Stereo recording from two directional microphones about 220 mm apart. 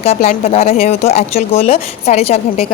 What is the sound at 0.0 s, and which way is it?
Speech, 25° left (ahead or behind).